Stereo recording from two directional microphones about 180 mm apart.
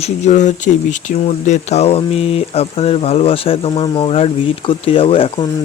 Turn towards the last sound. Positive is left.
turn(degrees=30)  # may be behind; listen again after turning